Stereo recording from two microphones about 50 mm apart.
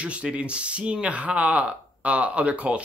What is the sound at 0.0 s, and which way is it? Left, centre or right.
Speech, right.